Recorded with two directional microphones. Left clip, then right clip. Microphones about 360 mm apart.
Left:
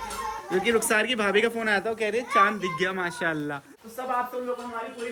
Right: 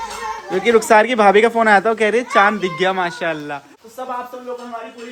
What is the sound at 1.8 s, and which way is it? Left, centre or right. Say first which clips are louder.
Speech: right 11 dB; right.